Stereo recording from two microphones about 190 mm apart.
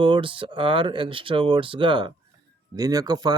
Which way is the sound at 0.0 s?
25° right (ahead or behind).